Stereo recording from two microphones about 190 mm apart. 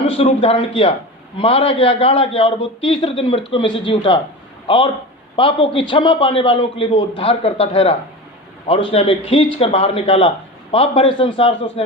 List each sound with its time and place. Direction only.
0.1 s a man's voice: 30° left (ahead or behind)